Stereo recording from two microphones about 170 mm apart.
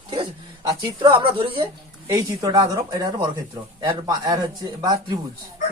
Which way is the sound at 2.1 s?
20° right (ahead or behind).